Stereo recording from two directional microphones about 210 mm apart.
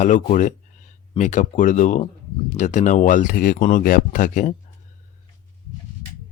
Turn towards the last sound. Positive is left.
turn(degrees=40)  # may be behind; listen again after turning